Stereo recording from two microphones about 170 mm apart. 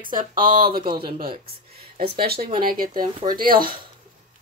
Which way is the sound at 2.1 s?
65° right (ahead or behind).